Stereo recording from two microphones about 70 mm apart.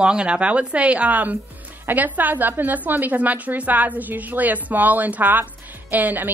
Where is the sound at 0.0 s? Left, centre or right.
Centre.